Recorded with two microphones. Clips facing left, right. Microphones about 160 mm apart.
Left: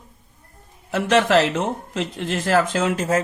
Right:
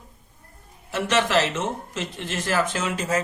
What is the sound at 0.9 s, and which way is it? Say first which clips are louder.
A man's voice: left 5 dB; 60° left (ahead or behind).